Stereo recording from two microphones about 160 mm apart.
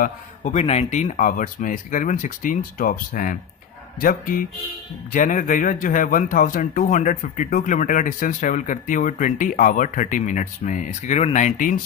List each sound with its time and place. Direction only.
0.0 s speech: 50° left (ahead or behind)